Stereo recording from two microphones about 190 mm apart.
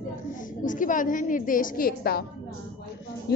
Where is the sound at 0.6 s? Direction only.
45° left (ahead or behind).